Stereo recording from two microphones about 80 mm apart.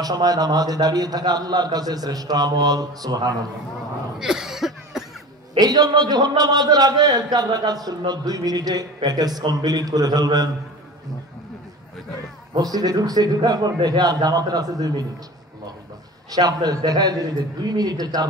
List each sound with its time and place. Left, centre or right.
0.0 s a man's voice: right
4.2 s cough: centre
5.6 s a man's voice: right
12.5 s a man's voice: right
16.3 s a man's voice: right